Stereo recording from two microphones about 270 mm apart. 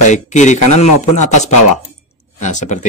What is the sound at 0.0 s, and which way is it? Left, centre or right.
Speech, left.